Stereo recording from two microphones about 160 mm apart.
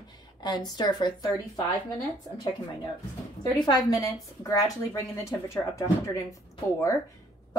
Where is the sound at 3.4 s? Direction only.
25° left (ahead or behind).